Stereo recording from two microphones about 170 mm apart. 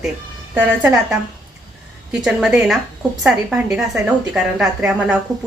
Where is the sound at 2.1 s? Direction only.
5° right (ahead or behind).